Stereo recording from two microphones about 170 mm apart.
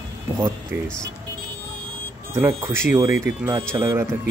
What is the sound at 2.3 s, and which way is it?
Speech, 15° right (ahead or behind).